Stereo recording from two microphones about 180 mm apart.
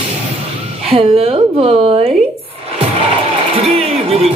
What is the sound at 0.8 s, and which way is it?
Speech, 30° right (ahead or behind).